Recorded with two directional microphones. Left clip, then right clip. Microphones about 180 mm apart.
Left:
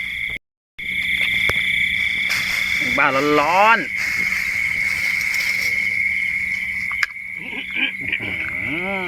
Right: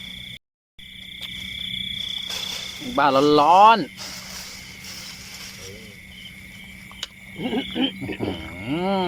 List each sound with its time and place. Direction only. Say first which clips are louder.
3.0 s speech: right 2 dB; centre (ahead or behind)
7.5 s wild animals: left 3 dB; 35° right (ahead or behind)